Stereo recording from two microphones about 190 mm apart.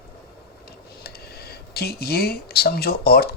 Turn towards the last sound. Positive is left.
turn(degrees=55)  # may be behind; listen again after turning